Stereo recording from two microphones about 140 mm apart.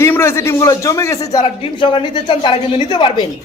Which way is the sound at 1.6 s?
35° left (ahead or behind).